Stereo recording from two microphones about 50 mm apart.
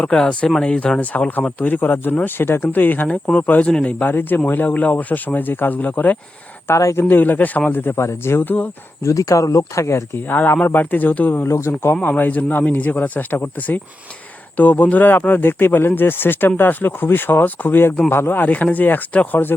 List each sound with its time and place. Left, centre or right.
0.0 s speech: centre
3.7 s speech: centre
4.0 s speech: left
6.7 s speech: left
7.1 s speech: left
7.7 s speech: left
7.9 s speech: left
8.4 s speech: left
9.0 s speech: left
10.2 s speech: left
11.4 s speech: left
12.0 s speech: left